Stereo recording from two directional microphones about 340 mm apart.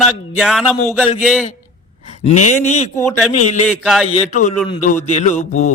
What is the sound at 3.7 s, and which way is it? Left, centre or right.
Speech, centre.